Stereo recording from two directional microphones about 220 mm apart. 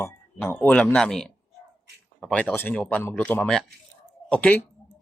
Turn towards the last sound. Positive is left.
turn(degrees=5)  # may be behind; listen again after turning